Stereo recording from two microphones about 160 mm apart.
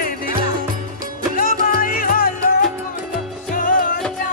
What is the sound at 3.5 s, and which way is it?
Music, 60° left (ahead or behind).